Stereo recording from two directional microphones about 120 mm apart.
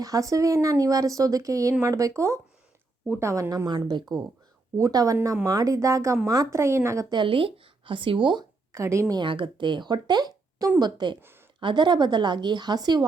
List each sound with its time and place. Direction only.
0.0 s speech: 30° right (ahead or behind)
3.7 s speech: 35° right (ahead or behind)
7.1 s speech: 45° right (ahead or behind); by 9.1 s 25° right (ahead or behind)
9.1 s speech: 45° right (ahead or behind)
11.2 s a sound: 20° right (ahead or behind)
11.6 s speech: 40° right (ahead or behind)